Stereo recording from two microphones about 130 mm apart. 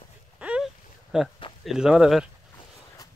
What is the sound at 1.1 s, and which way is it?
Speech, 5° right (ahead or behind).